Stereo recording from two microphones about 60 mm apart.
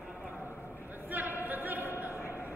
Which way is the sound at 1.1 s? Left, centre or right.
Right.